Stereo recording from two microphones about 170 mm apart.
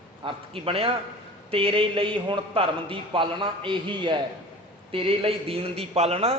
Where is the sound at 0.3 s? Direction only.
35° right (ahead or behind).